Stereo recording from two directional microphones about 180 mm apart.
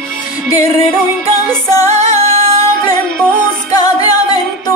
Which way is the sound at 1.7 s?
20° left (ahead or behind).